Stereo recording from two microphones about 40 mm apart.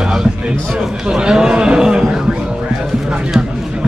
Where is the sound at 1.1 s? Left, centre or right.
Centre.